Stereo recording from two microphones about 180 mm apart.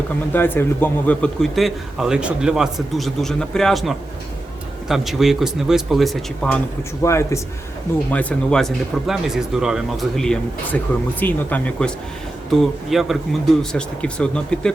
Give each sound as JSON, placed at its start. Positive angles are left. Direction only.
{"t": 0.3, "sound": "a man's voice", "side_deg": 10}
{"t": 7.0, "sound": "a man's voice", "side_deg": 15}